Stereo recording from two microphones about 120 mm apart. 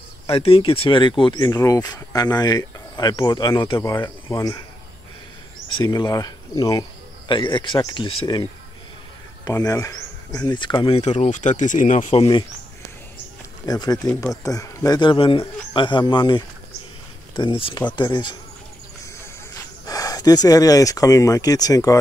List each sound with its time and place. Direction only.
0.3 s speech: 50° left (ahead or behind)
1.3 s speech: 30° left (ahead or behind)
4.0 s speech: 25° left (ahead or behind)
5.9 s speech: 30° left (ahead or behind)
7.2 s speech: 40° left (ahead or behind)
9.4 s speech: 30° left (ahead or behind)
11.0 s speech: 70° left (ahead or behind); by 12.1 s 90° left
13.7 s speech: 35° left (ahead or behind)
15.0 s speech: 45° left (ahead or behind)
19.5 s speech: 30° left (ahead or behind)